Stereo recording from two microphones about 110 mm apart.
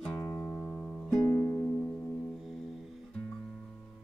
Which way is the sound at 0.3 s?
20° left (ahead or behind).